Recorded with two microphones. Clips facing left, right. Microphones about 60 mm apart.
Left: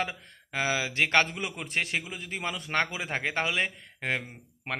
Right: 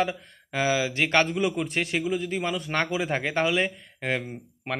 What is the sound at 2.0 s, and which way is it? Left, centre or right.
Speech, left.